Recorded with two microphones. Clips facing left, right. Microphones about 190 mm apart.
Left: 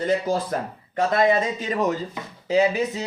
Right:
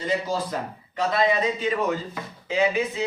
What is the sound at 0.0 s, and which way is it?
Speech, 50° left (ahead or behind).